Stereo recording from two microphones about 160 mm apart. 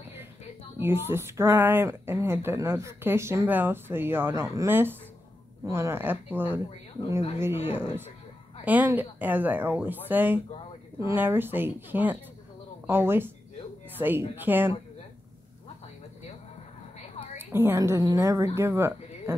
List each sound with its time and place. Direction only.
0.7 s a woman's voice: 15° right (ahead or behind)
7.6 s a woman's voice: 15° right (ahead or behind)
17.4 s a woman's voice: 15° right (ahead or behind)